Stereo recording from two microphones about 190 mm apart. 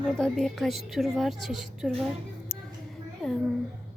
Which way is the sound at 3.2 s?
Centre (ahead or behind).